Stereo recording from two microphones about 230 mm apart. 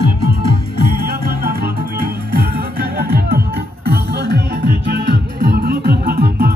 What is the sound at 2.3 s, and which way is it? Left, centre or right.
Music, right.